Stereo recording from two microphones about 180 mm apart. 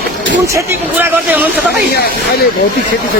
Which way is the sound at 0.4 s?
15° right (ahead or behind).